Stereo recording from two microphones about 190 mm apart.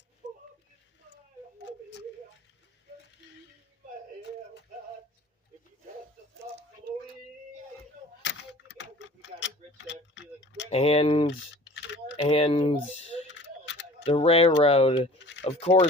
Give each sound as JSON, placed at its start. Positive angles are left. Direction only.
{"t": 1.5, "sound": "a sound", "side_deg": 65}
{"t": 8.2, "sound": "a sound", "side_deg": 70}
{"t": 10.7, "sound": "speech", "side_deg": 30}
{"t": 11.3, "sound": "typing", "side_deg": 70}
{"t": 12.1, "sound": "speech", "side_deg": 30}
{"t": 13.2, "sound": "mechanisms", "side_deg": 70}
{"t": 14.1, "sound": "speech", "side_deg": 30}